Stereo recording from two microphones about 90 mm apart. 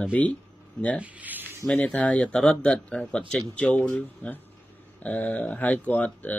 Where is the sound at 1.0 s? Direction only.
20° right (ahead or behind).